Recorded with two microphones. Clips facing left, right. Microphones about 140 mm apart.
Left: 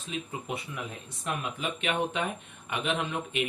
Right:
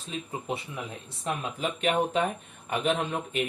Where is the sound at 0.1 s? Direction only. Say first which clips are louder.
Right 2 dB; 30° right (ahead or behind).